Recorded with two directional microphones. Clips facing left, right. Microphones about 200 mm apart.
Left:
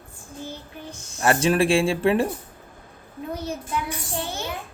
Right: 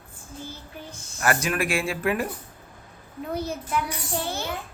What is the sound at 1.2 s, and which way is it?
Speech, 30° left (ahead or behind).